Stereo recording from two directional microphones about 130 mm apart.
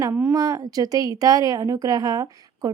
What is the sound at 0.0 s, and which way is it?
Speech, 20° right (ahead or behind).